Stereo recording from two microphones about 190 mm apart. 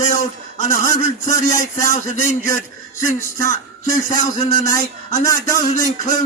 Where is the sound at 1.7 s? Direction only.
40° left (ahead or behind).